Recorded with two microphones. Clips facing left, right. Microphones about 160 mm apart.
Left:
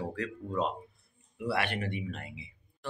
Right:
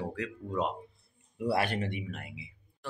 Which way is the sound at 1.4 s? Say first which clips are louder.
Right 2 dB; 35° right (ahead or behind).